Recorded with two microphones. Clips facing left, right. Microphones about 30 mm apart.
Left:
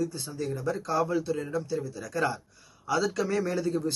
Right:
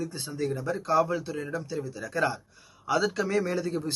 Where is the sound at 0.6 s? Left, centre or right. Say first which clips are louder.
Right 2 dB; centre.